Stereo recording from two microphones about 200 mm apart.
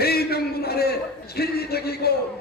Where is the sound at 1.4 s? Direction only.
50° left (ahead or behind).